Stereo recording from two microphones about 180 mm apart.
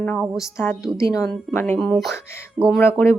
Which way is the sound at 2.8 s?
15° left (ahead or behind).